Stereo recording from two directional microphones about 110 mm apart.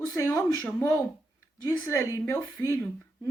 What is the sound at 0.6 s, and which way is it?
Speech, 15° left (ahead or behind).